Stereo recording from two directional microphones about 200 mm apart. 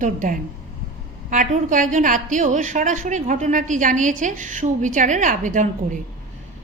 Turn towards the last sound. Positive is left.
turn(degrees=-40)  # may be behind; listen again after turning